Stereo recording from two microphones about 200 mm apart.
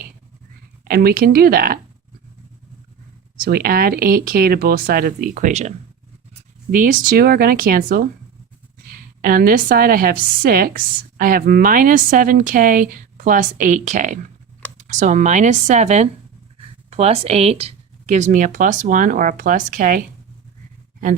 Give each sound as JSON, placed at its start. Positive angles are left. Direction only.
{"t": 0.9, "sound": "a woman's voice", "side_deg": -50}
{"t": 3.3, "sound": "a woman's voice", "side_deg": -45}